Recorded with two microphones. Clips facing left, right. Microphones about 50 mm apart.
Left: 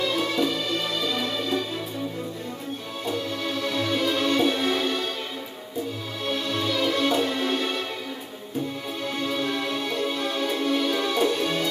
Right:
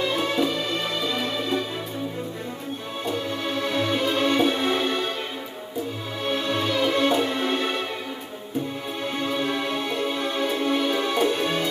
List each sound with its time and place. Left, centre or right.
0.0 s music: right
3.1 s music: right
6.2 s music: right
9.0 s music: right